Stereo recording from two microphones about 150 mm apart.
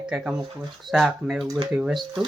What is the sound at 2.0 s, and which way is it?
Speech, 30° right (ahead or behind).